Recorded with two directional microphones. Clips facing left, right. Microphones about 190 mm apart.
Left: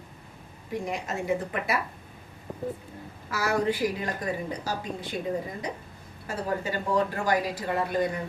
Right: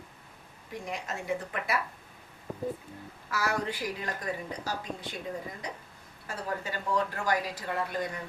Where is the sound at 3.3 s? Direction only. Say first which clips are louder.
Left 5 dB; 5° left (ahead or behind).